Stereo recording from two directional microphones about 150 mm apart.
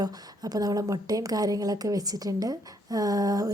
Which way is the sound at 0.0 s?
25° right (ahead or behind).